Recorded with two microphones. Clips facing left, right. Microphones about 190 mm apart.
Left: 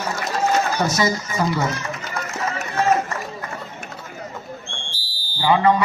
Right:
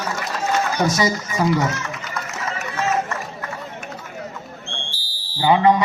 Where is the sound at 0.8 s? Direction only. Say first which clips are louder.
Right 2 dB; 15° right (ahead or behind).